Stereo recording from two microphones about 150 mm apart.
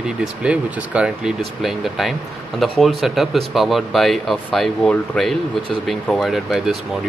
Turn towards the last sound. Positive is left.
turn(degrees=0)  # may be behind; listen again after turning